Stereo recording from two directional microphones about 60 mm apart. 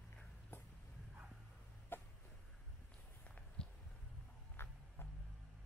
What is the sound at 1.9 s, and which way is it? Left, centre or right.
Cough, left.